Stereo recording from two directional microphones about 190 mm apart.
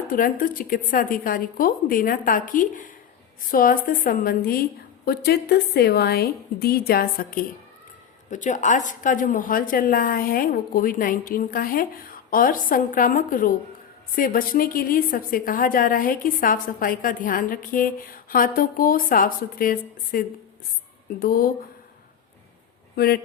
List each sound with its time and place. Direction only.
0.1 s a woman's voice: 45° left (ahead or behind)
23.0 s a woman's voice: 55° left (ahead or behind)